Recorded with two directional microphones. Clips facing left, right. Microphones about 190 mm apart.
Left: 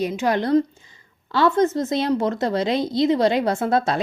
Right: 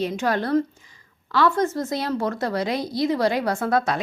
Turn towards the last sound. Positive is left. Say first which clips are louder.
# left 2 dB
turn(degrees=25)  # may be behind; listen again after turning